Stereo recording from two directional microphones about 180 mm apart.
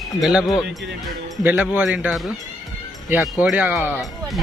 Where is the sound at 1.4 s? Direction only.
10° right (ahead or behind).